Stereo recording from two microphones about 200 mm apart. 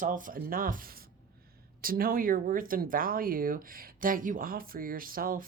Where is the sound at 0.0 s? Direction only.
40° right (ahead or behind).